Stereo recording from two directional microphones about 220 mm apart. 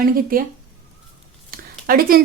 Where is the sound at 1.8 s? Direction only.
40° right (ahead or behind).